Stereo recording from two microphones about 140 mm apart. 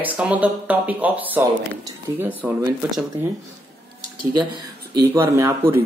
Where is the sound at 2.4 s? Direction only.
10° right (ahead or behind).